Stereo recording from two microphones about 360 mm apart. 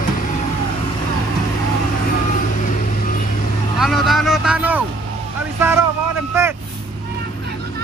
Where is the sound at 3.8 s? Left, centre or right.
Centre.